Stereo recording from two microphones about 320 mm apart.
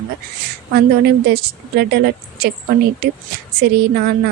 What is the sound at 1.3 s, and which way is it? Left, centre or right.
A woman's voice, right.